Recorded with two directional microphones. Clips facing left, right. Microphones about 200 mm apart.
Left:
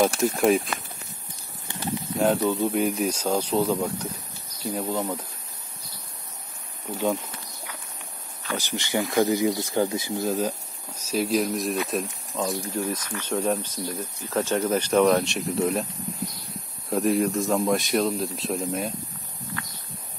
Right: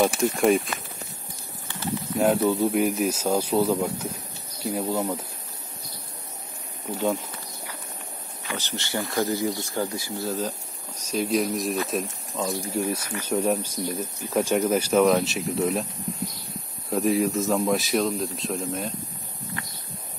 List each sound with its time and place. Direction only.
0.0 s speech: centre (ahead or behind)
2.1 s speech: 5° right (ahead or behind)
8.5 s speech: 15° left (ahead or behind)